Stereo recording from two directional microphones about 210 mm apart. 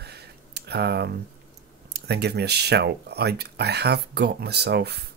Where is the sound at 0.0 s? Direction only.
50° right (ahead or behind).